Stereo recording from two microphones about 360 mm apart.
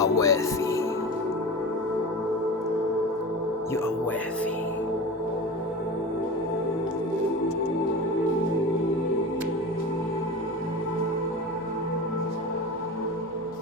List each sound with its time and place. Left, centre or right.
0.0 s music: centre